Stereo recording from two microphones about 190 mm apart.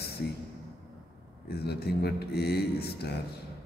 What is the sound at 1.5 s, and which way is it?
A man's voice, 55° left (ahead or behind).